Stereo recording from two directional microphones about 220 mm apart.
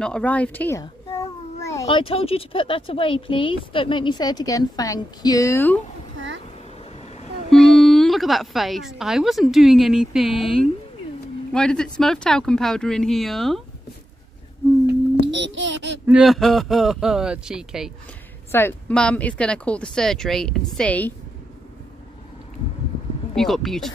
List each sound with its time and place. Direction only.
0.0 s a sound: 5° left (ahead or behind)
1.9 s speech: 25° left (ahead or behind)
6.1 s a sound: 55° right (ahead or behind)
7.4 s a woman's voice: centre (ahead or behind)
14.9 s babbling: 55° right (ahead or behind)
16.1 s speech: centre (ahead or behind)
18.5 s speech: 10° left (ahead or behind)
23.3 s speech: centre (ahead or behind)